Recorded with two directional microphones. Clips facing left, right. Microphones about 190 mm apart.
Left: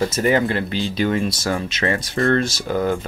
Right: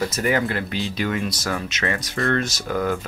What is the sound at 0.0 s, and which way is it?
Speech, 25° left (ahead or behind).